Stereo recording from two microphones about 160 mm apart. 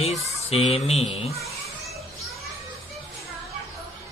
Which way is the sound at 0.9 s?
40° left (ahead or behind).